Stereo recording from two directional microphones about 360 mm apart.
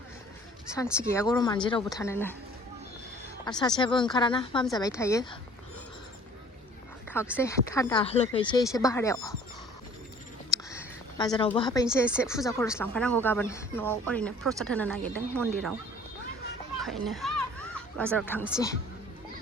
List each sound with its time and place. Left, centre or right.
0.9 s speech: centre
3.4 s speech: centre
7.3 s speech: centre
10.7 s a sound: centre
11.9 s speech: centre
16.8 s speech: centre